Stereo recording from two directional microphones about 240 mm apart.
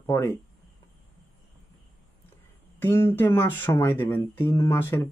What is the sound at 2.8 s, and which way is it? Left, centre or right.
Speech, centre.